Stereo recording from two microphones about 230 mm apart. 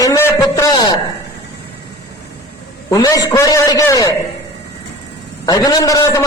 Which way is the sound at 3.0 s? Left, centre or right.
Centre.